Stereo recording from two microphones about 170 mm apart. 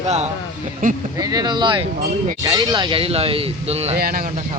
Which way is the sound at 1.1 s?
20° right (ahead or behind).